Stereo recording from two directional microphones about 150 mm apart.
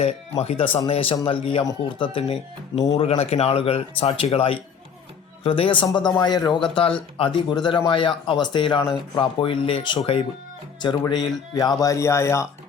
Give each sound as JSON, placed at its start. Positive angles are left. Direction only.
{"t": 0.0, "sound": "speech", "side_deg": 45}